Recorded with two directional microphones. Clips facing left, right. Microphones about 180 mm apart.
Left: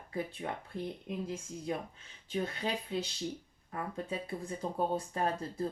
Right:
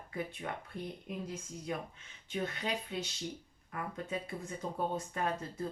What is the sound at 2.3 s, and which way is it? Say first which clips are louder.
Speech: left 2 dB; 30° left (ahead or behind).